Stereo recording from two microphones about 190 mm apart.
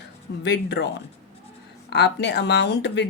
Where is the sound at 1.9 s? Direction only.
65° left (ahead or behind).